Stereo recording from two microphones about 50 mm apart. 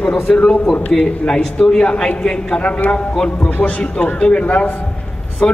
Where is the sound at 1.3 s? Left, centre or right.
Centre.